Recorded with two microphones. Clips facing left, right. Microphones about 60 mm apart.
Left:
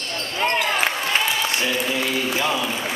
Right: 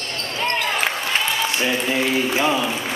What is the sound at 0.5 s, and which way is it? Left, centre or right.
Basketball bounce, centre.